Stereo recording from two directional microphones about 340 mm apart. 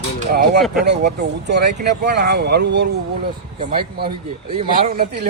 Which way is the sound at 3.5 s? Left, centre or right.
Centre.